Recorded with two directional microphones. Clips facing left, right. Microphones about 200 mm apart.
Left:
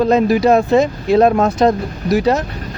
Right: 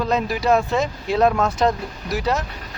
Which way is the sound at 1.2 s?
35° left (ahead or behind).